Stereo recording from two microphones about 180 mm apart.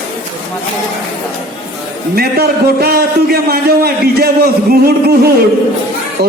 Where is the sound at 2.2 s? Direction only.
60° right (ahead or behind).